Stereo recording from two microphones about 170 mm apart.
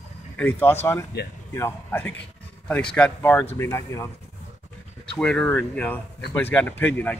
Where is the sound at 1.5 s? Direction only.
15° left (ahead or behind).